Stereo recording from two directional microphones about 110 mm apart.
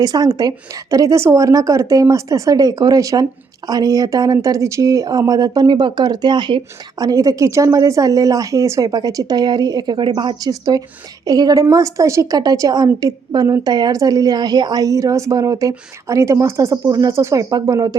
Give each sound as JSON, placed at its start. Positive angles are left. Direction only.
{"t": 0.0, "sound": "a woman's voice", "side_deg": -35}
{"t": 7.0, "sound": "a woman's voice", "side_deg": -30}
{"t": 10.5, "sound": "a woman's voice", "side_deg": -35}